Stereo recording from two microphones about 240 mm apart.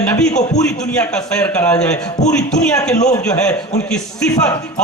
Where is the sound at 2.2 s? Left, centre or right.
Left.